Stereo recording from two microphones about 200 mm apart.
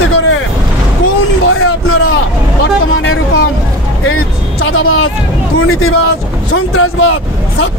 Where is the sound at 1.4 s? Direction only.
90° left.